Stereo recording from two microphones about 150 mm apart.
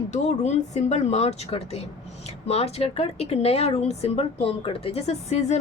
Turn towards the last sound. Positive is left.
turn(degrees=45)  # may be behind; listen again after turning